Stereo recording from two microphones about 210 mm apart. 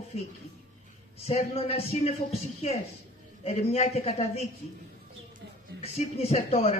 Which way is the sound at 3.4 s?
30° left (ahead or behind).